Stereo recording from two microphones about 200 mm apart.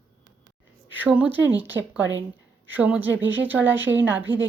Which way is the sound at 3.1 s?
70° right (ahead or behind).